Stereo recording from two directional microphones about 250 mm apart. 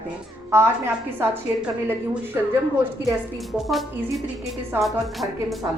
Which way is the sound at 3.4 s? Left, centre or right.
Centre.